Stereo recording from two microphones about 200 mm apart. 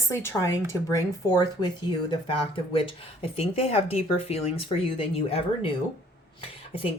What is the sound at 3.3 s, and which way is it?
Speech, 30° left (ahead or behind).